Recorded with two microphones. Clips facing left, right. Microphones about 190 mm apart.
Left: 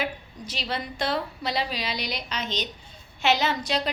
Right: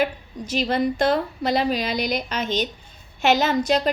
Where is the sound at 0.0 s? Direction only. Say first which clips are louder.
Right 7 dB; 50° right (ahead or behind).